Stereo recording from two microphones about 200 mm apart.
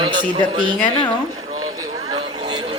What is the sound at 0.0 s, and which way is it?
Speech, 25° right (ahead or behind).